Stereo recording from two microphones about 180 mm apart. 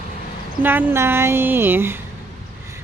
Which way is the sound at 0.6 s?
10° right (ahead or behind).